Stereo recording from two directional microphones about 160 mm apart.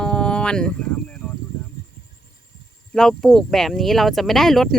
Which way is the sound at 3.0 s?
5° left (ahead or behind).